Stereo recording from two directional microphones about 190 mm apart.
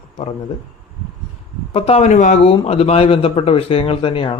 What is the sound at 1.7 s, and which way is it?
Speech, 30° left (ahead or behind).